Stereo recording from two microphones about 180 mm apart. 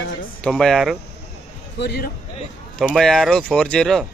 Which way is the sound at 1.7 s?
70° left (ahead or behind).